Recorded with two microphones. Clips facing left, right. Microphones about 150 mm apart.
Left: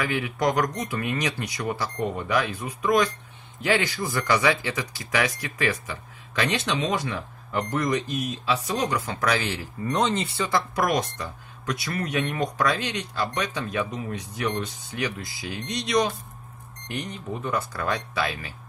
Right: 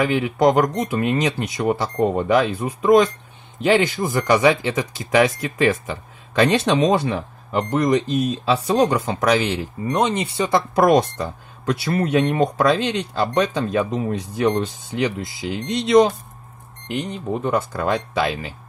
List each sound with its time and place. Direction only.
0.0 s speech: 25° right (ahead or behind)